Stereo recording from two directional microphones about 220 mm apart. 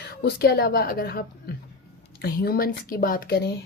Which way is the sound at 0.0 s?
45° left (ahead or behind).